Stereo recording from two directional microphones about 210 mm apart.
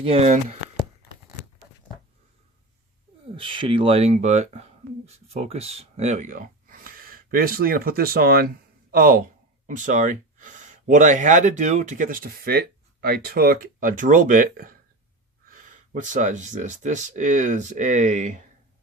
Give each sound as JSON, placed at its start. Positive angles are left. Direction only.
{"t": 0.0, "sound": "speech", "side_deg": -30}
{"t": 3.3, "sound": "speech", "side_deg": -25}